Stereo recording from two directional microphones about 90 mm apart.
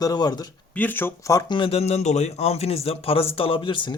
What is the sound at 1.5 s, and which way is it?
Speech, 80° left.